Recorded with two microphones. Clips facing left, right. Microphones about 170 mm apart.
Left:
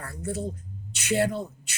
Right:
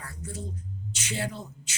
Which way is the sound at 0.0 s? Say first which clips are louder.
Left 7 dB; 60° left (ahead or behind).